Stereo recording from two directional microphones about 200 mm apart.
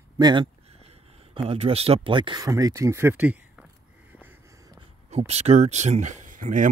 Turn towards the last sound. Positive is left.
turn(degrees=-40)  # may be behind; listen again after turning